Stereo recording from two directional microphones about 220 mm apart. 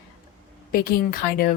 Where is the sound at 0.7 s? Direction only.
40° left (ahead or behind).